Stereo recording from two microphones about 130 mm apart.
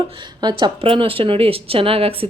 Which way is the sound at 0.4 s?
40° right (ahead or behind).